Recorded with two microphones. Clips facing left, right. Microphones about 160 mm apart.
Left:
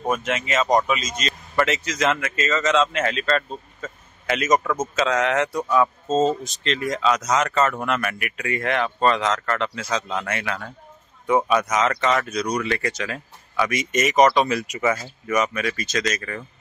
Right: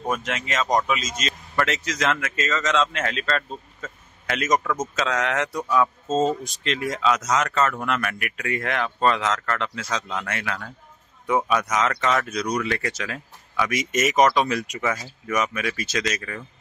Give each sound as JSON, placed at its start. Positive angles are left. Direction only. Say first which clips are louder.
{"t": 0.0, "sound": "speech", "louder": "left 3 dB", "side_deg": 5}
{"t": 6.0, "sound": "speech", "louder": "left 2 dB", "side_deg": -10}